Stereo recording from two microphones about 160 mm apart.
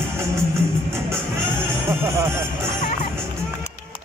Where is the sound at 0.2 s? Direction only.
15° right (ahead or behind).